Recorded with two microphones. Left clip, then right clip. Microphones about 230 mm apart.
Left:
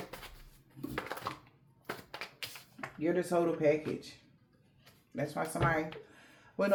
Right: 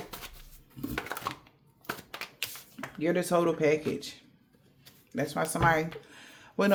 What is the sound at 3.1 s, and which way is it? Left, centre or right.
Speech, right.